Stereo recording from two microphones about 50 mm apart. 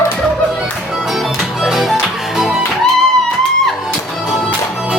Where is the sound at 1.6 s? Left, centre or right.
Centre.